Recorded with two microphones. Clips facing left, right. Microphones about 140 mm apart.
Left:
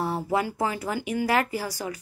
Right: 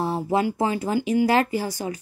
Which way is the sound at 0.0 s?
20° right (ahead or behind).